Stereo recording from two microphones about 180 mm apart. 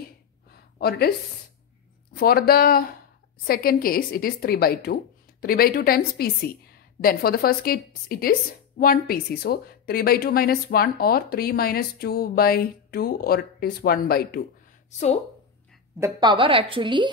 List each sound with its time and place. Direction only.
0.7 s speech: 60° left (ahead or behind)
2.1 s a woman's voice: 60° left (ahead or behind)
14.9 s a woman's voice: 40° left (ahead or behind)
16.0 s a woman's voice: 25° right (ahead or behind)